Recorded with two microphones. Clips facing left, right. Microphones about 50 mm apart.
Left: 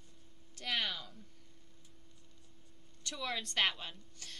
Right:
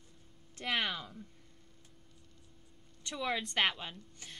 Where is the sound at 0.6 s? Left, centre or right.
Right.